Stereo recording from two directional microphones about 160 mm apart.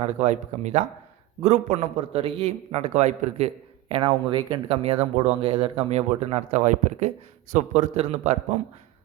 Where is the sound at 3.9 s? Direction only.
35° right (ahead or behind).